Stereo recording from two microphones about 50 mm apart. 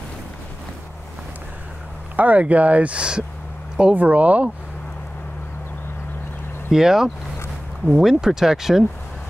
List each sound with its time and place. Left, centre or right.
2.1 s speech: right
6.7 s speech: centre